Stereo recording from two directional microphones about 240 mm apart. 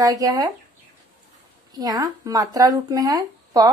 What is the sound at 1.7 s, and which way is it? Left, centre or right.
Speech, centre.